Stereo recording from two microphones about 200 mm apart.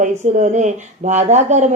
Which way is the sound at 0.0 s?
35° right (ahead or behind).